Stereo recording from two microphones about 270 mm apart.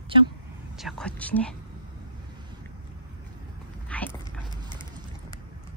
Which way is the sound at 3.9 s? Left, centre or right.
Centre.